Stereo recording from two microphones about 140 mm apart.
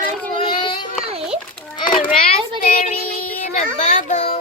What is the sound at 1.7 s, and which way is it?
Children playing, 35° left (ahead or behind).